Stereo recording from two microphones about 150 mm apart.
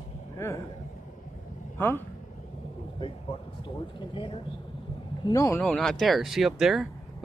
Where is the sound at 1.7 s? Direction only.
15° left (ahead or behind).